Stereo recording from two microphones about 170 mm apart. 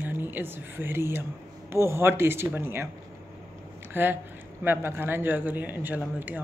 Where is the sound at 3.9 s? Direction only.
10° right (ahead or behind).